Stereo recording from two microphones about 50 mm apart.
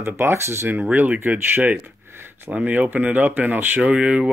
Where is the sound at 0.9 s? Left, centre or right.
Right.